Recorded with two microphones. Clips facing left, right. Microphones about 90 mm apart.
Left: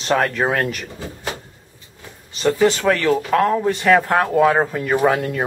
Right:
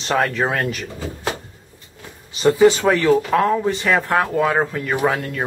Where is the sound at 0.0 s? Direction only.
Centre (ahead or behind).